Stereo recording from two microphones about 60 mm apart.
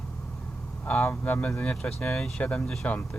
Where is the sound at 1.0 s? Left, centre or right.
Left.